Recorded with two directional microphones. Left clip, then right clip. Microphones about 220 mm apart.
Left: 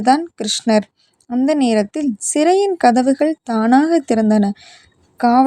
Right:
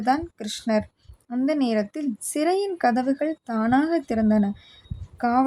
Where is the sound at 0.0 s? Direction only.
25° left (ahead or behind).